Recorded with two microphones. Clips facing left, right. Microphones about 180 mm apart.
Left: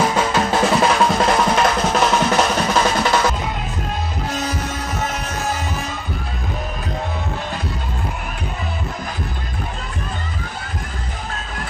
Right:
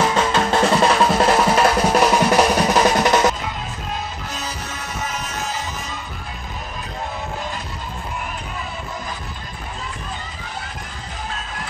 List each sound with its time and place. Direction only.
0.1 s drum: 5° left (ahead or behind); by 3.3 s 15° right (ahead or behind)